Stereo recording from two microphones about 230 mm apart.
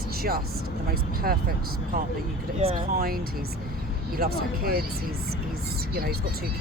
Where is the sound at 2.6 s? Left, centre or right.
Right.